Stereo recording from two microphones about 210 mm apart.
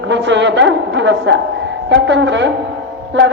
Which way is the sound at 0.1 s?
60° right (ahead or behind).